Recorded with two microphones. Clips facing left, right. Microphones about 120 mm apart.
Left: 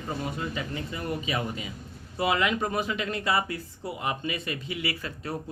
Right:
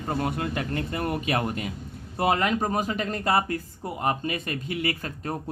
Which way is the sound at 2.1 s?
45° right (ahead or behind).